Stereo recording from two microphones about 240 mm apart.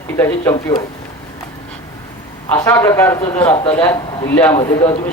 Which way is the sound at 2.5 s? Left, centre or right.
Centre.